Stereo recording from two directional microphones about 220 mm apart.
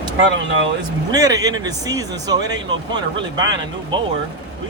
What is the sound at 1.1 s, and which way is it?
Speech, 15° right (ahead or behind).